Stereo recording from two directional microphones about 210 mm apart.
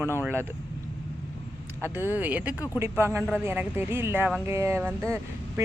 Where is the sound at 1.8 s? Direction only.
10° right (ahead or behind).